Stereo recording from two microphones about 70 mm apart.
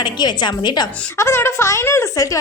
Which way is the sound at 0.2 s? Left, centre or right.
Left.